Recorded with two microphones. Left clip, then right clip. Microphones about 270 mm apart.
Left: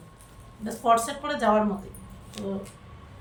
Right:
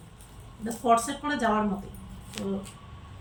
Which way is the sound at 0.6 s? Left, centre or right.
Centre.